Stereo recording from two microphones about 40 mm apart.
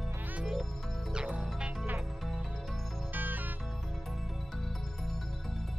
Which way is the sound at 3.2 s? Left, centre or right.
Right.